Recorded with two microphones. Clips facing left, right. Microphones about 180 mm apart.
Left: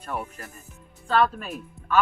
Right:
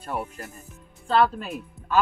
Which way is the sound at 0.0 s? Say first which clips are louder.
Right 2 dB; 25° right (ahead or behind).